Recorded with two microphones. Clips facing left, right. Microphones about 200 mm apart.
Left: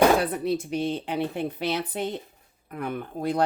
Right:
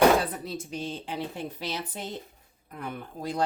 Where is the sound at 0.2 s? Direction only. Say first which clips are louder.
Left 6 dB; 65° left (ahead or behind).